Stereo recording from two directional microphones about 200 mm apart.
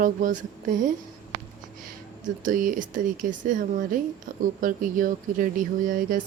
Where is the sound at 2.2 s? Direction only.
40° right (ahead or behind).